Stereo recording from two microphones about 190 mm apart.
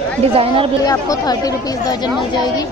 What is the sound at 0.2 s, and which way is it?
Speech, 30° right (ahead or behind).